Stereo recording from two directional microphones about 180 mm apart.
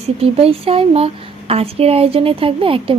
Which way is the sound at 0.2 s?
35° right (ahead or behind).